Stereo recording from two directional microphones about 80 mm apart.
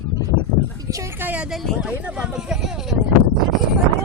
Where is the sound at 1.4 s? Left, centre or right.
Centre.